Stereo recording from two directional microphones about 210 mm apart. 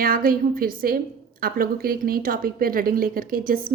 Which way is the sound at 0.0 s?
45° right (ahead or behind).